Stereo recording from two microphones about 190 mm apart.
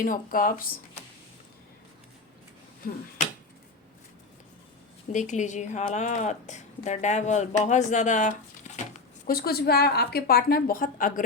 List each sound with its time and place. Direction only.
0.0 s a woman's voice: 45° left (ahead or behind)
5.1 s speech: 40° left (ahead or behind)
9.2 s a woman's voice: 55° left (ahead or behind)